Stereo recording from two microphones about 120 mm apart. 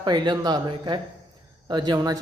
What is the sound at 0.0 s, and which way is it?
A woman's voice, 35° right (ahead or behind).